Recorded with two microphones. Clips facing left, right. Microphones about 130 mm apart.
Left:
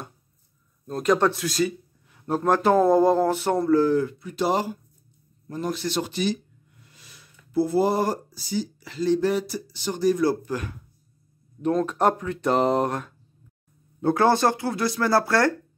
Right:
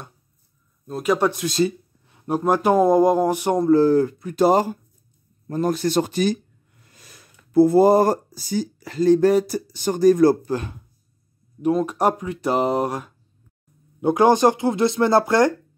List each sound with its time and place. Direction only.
0.8 s speech: 5° right (ahead or behind)
1.4 s speech: 25° right (ahead or behind)
2.1 s speech: 15° right (ahead or behind)
3.7 s speech: 35° right (ahead or behind)
10.4 s speech: 25° right (ahead or behind)
11.6 s speech: 10° right (ahead or behind)